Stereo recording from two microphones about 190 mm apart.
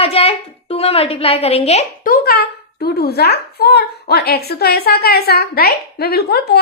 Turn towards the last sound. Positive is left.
turn(degrees=55)  # may be behind; listen again after turning